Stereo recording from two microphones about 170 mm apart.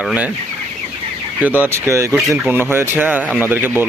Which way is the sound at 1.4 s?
10° right (ahead or behind).